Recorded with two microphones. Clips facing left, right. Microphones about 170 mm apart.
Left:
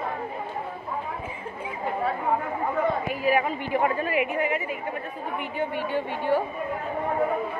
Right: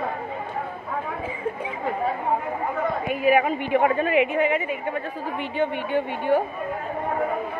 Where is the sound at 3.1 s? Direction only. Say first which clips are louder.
Right 4 dB; 20° right (ahead or behind).